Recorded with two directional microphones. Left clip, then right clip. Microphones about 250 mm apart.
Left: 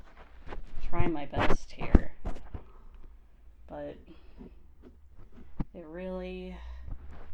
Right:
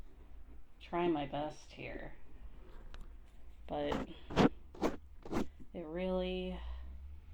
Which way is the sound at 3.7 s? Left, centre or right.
Centre.